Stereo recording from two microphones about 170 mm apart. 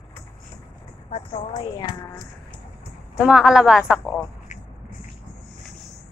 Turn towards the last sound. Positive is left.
turn(degrees=45)  # may be behind; listen again after turning